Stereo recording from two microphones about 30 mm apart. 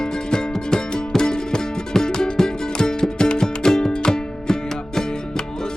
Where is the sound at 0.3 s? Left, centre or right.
Left.